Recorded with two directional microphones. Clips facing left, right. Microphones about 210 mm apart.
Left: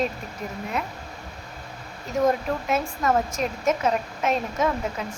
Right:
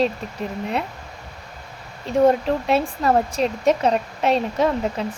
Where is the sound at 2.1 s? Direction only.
30° right (ahead or behind).